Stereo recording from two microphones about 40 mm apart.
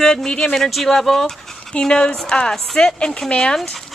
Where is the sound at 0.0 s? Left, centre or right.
Centre.